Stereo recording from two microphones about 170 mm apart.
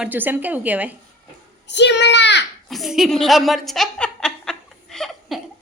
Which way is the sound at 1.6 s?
90° left.